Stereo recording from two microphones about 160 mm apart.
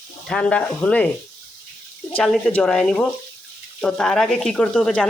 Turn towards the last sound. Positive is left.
turn(degrees=10)  # may be behind; listen again after turning